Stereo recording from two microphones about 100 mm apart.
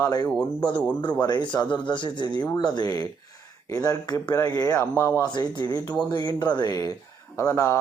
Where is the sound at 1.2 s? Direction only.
45° left (ahead or behind); by 5.1 s 25° left (ahead or behind).